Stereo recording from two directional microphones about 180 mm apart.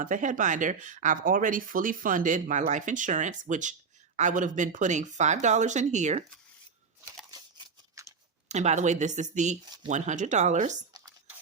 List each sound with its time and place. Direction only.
0.0 s speech: 45° right (ahead or behind)
8.0 s a sound: 15° right (ahead or behind)
8.4 s speech: 40° right (ahead or behind)